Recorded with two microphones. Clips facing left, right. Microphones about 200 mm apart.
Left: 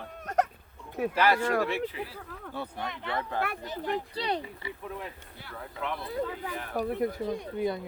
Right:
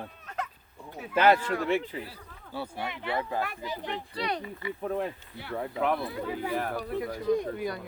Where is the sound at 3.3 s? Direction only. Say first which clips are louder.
Left 1 dB; 65° left (ahead or behind).